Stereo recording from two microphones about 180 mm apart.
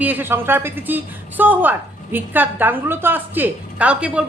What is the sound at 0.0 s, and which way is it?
A woman's voice, 10° right (ahead or behind).